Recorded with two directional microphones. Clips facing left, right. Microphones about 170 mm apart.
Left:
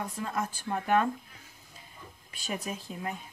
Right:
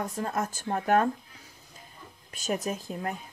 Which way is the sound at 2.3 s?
45° right (ahead or behind).